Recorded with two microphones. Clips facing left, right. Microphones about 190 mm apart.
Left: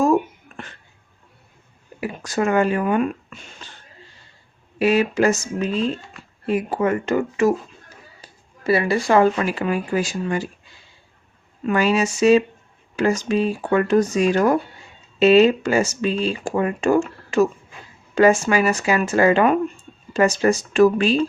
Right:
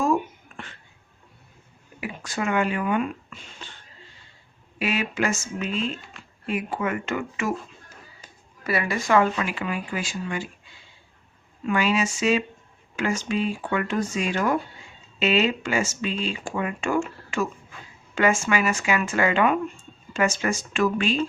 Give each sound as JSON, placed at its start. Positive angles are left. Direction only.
{"t": 0.0, "sound": "a sound", "side_deg": 40}
{"t": 2.0, "sound": "speech", "side_deg": 40}
{"t": 4.8, "sound": "speech", "side_deg": 40}
{"t": 11.6, "sound": "speech", "side_deg": 40}